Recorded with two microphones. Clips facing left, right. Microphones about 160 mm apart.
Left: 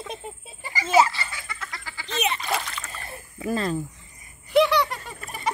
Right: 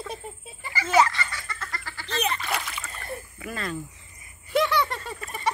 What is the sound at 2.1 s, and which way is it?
Splash, 20° left (ahead or behind).